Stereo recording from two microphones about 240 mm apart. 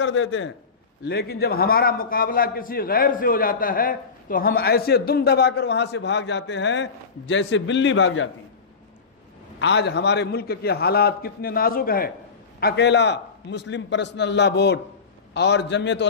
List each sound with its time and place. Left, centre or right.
0.0 s a man's voice: left
1.0 s a man's voice: left
9.6 s a man's voice: left